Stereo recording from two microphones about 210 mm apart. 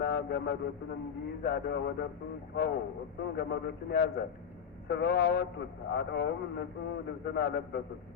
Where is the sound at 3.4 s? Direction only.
50° left (ahead or behind).